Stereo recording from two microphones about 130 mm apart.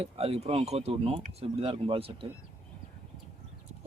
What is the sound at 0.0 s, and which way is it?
Speech, 50° right (ahead or behind).